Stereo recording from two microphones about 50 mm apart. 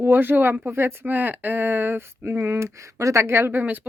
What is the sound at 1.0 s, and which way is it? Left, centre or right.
Speech, right.